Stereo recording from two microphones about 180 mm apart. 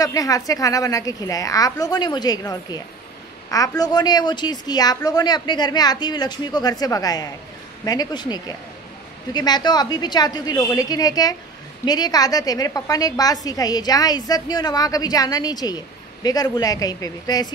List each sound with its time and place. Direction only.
0.0 s a woman's voice: 20° left (ahead or behind)